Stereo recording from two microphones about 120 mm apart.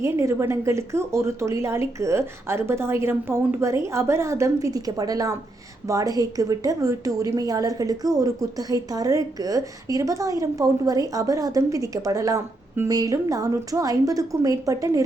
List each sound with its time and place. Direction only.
0.0 s a woman's voice: 25° right (ahead or behind)